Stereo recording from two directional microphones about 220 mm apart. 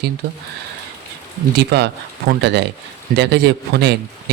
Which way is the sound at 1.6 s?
50° right (ahead or behind).